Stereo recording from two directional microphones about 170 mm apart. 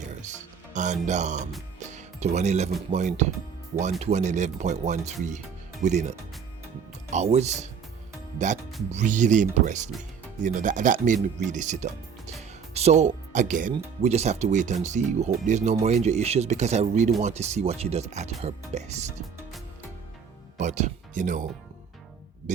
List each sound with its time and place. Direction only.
0.0 s music: 45° right (ahead or behind)
0.7 s speech: 45° right (ahead or behind)
1.9 s music: 45° right (ahead or behind)
2.9 s speech: 45° right (ahead or behind)
8.9 s speech: 45° right (ahead or behind)
20.6 s speech: 45° right (ahead or behind)
22.5 s music: 45° right (ahead or behind)